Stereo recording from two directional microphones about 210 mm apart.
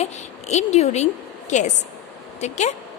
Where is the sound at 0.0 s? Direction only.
30° left (ahead or behind).